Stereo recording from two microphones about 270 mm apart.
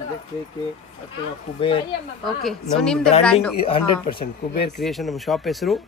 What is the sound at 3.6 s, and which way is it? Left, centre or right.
Speech, centre.